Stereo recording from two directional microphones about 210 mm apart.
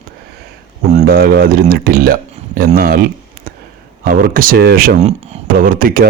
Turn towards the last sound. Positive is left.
turn(degrees=-45)  # may be behind; listen again after turning